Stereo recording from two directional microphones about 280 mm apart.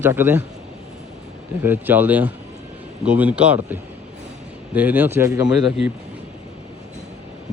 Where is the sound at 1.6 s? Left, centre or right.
Centre.